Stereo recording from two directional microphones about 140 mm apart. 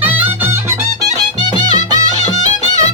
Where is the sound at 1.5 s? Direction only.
30° right (ahead or behind).